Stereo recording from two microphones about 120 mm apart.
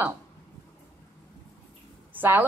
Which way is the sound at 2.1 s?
15° right (ahead or behind).